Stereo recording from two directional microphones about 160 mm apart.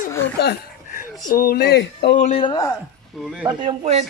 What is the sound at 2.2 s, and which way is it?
Speech, 45° left (ahead or behind).